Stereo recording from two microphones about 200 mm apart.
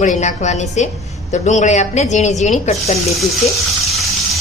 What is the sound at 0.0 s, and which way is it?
Speech, 35° left (ahead or behind).